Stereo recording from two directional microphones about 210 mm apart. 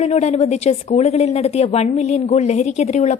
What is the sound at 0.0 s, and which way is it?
Speech, 30° left (ahead or behind).